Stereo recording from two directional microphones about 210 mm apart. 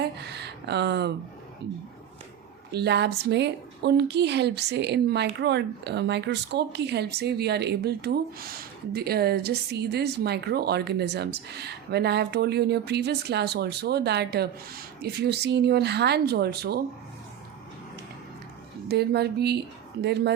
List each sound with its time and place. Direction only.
0.0 s a sound: 50° right (ahead or behind)
2.7 s a woman's voice: 50° right (ahead or behind)
18.9 s a woman's voice: 50° right (ahead or behind)